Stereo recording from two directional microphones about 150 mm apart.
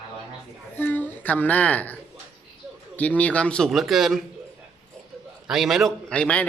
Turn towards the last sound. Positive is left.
turn(degrees=10)  # may be behind; listen again after turning